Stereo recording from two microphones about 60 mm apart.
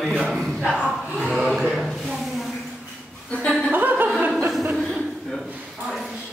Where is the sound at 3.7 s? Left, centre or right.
Right.